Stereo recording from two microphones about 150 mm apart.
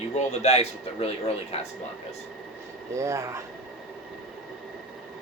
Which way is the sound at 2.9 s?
20° right (ahead or behind).